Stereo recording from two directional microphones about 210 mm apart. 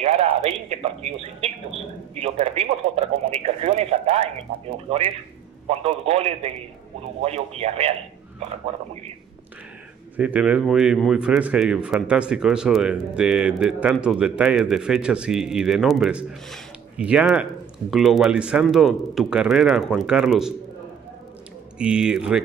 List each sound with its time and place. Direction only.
0.0 s a man's voice: 30° right (ahead or behind)
10.1 s a man's voice: 5° right (ahead or behind)
21.7 s a man's voice: 5° right (ahead or behind)